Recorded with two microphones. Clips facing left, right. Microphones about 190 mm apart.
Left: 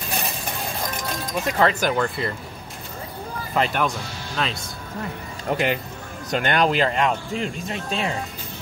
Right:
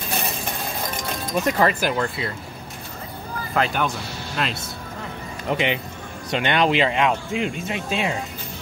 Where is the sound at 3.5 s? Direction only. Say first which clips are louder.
Even; centre (ahead or behind).